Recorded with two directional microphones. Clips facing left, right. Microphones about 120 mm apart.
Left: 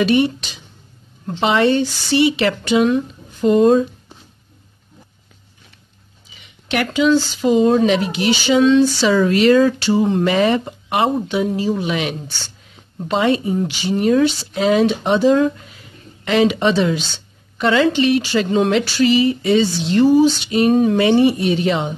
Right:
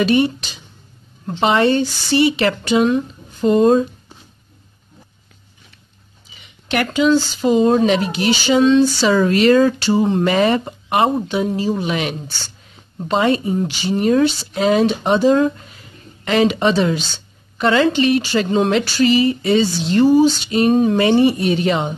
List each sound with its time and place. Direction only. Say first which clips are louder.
0.0 s speech: even; 35° right (ahead or behind)
1.4 s speech: even; 40° right (ahead or behind)
6.7 s speech: even; 40° right (ahead or behind)